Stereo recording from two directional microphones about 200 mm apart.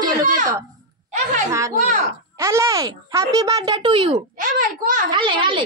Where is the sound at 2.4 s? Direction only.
15° right (ahead or behind).